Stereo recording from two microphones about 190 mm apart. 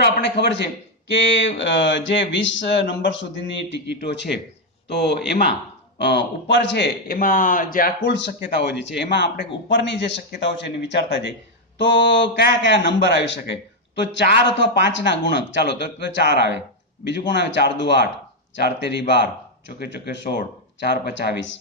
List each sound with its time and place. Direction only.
0.0 s a man's voice: 60° left (ahead or behind)
8.0 s a man's voice: 65° left (ahead or behind)
11.8 s a man's voice: 70° left (ahead or behind)